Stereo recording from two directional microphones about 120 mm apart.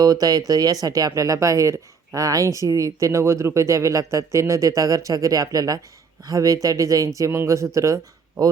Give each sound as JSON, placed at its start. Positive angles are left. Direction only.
{"t": 0.0, "sound": "speech", "side_deg": -30}